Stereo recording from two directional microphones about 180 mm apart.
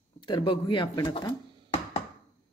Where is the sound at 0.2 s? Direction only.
25° left (ahead or behind).